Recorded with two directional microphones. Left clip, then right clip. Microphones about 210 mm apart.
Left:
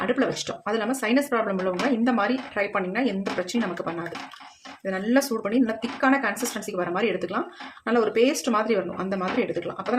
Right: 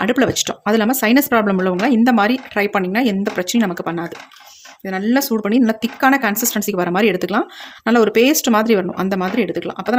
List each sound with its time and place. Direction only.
0.0 s speech: 50° right (ahead or behind)
4.9 s speech: 45° right (ahead or behind)